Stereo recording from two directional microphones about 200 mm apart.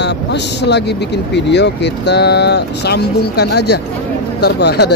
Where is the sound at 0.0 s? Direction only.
60° left (ahead or behind).